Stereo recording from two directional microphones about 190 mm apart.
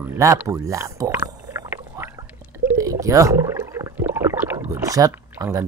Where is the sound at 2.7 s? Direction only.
15° right (ahead or behind).